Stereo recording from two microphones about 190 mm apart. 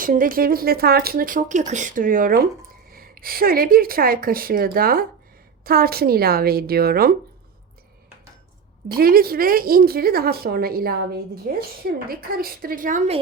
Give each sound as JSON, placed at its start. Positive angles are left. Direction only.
{"t": 0.0, "sound": "a woman's voice", "side_deg": -45}
{"t": 9.0, "sound": "a woman's voice", "side_deg": -50}